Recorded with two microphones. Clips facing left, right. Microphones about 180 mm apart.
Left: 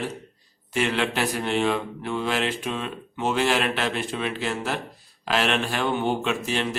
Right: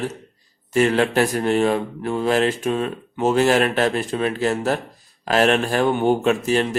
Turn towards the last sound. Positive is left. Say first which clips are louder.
# right 7 dB
turn(degrees=-45)  # may be behind; listen again after turning